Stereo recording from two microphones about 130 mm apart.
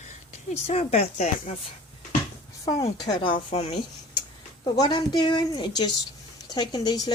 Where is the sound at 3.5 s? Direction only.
55° left (ahead or behind).